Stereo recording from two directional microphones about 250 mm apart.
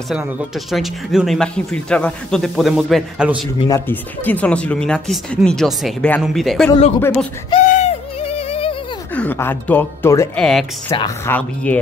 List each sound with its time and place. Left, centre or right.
0.1 s speech: centre
3.6 s speech: centre
7.5 s bird: left
9.1 s speech: centre